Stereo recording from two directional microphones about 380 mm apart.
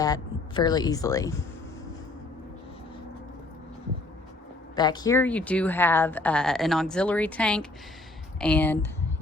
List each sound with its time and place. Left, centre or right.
0.0 s speech: centre
4.7 s speech: centre